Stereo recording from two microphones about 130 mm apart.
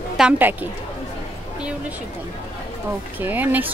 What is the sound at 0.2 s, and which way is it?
Speech, 10° right (ahead or behind).